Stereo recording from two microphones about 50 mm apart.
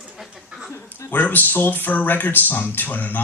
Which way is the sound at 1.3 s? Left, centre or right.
Left.